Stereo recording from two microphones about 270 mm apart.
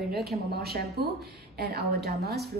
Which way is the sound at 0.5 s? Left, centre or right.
Right.